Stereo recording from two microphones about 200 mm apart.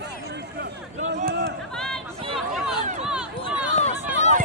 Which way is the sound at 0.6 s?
65° right (ahead or behind).